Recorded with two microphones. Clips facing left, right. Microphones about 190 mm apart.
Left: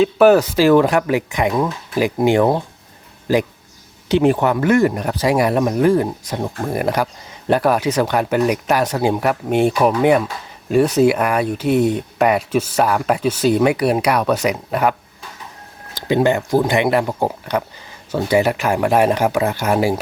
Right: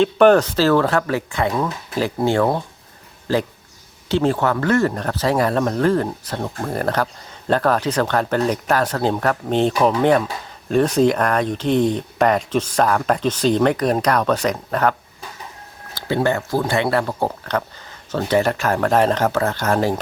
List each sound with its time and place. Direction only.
0.0 s speech: 5° left (ahead or behind)
16.0 s speech: 15° left (ahead or behind)